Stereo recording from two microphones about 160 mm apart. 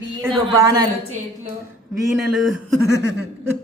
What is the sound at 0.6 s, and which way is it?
Speech, 15° right (ahead or behind).